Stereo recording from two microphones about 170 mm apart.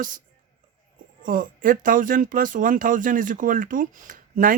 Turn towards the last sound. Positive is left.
turn(degrees=-50)  # may be behind; listen again after turning